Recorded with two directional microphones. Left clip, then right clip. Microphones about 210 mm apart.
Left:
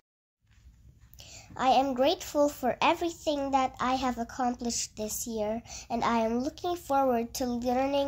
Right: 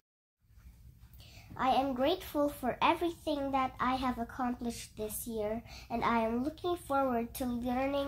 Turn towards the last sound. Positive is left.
turn(degrees=45)  # may be behind; listen again after turning